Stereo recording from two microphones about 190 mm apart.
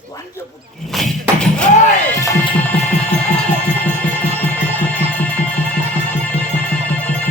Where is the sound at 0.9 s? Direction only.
Centre (ahead or behind).